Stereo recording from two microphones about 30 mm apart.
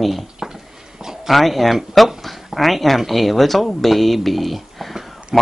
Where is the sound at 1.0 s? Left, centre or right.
Centre.